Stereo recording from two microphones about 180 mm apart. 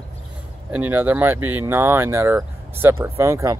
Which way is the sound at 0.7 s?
10° right (ahead or behind).